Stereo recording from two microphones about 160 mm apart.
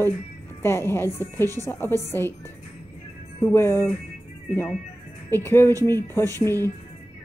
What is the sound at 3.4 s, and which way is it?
Speech, 15° left (ahead or behind).